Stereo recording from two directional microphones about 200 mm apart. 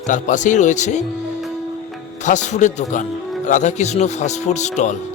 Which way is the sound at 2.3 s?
35° left (ahead or behind).